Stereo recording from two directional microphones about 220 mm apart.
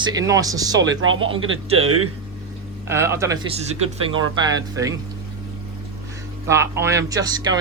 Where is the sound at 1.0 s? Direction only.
65° right (ahead or behind).